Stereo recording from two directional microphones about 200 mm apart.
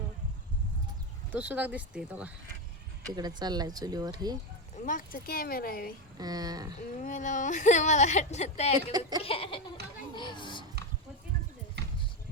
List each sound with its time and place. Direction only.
1.3 s speech: 10° right (ahead or behind)
3.2 s speech: 20° right (ahead or behind)
4.9 s speech: 45° left (ahead or behind)
6.1 s speech: 20° right (ahead or behind)
6.7 s speech: 40° left (ahead or behind)
8.9 s speech: 20° right (ahead or behind)
9.2 s a child's voice: 25° left (ahead or behind)
9.8 s speech: 55° right (ahead or behind)
10.2 s a child's voice: 25° left (ahead or behind)
11.8 s basketball bounce: 55° right (ahead or behind)